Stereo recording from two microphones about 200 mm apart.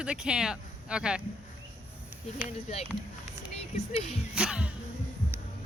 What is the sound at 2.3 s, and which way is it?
Speech, 35° left (ahead or behind).